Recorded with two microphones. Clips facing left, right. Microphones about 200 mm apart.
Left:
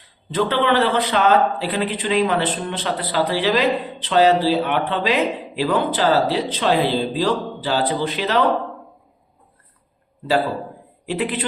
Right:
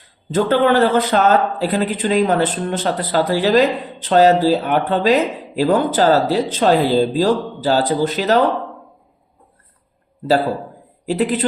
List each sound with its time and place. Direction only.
0.3 s a man's voice: 45° right (ahead or behind)
11.0 s speech: 40° right (ahead or behind)